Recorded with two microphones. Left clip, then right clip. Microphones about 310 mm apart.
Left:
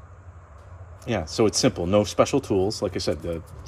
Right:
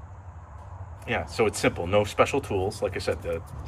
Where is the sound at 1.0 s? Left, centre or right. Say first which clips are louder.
Left 2 dB; centre.